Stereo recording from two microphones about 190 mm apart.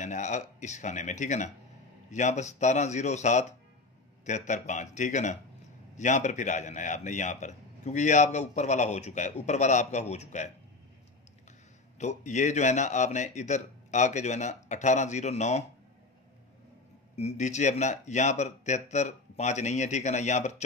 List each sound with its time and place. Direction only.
0.0 s a man's voice: 40° left (ahead or behind)
12.0 s a man's voice: 35° left (ahead or behind)
17.1 s a man's voice: 35° left (ahead or behind)